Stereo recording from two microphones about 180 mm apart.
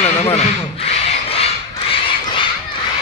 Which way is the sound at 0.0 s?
35° left (ahead or behind).